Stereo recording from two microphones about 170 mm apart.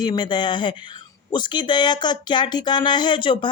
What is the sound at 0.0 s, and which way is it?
Speech, 25° left (ahead or behind).